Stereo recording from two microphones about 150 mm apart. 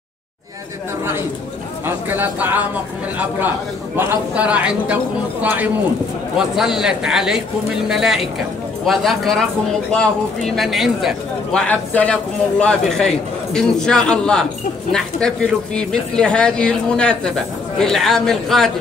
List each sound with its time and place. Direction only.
1.9 s a man's voice: 15° right (ahead or behind)
11.6 s a man's voice: 10° left (ahead or behind)